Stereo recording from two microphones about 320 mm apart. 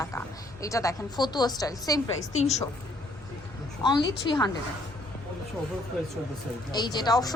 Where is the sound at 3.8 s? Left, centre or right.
Centre.